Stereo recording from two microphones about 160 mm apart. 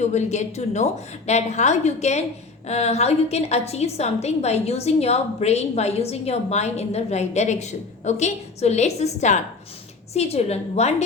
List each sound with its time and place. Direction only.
0.0 s a woman's voice: 45° left (ahead or behind)